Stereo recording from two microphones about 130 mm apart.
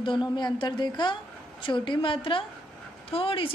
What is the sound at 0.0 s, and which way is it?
A woman's voice, 35° left (ahead or behind).